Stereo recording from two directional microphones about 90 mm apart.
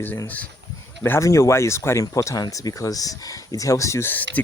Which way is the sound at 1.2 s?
35° left (ahead or behind).